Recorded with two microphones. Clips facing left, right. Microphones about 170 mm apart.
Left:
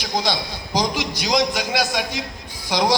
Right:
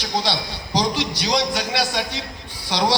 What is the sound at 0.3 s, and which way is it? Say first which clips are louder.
A man's voice: left 1 dB; 10° left (ahead or behind).